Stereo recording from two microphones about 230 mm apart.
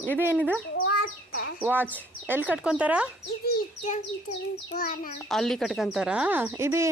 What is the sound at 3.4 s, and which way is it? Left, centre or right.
Bird, left.